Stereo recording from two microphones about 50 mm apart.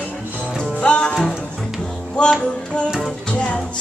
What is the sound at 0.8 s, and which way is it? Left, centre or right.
Music, left.